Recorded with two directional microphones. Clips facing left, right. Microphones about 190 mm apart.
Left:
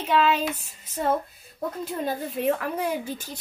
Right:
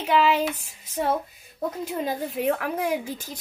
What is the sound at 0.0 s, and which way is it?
A woman's voice, 10° right (ahead or behind).